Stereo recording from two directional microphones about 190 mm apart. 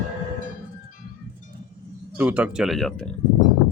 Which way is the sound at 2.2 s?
10° right (ahead or behind).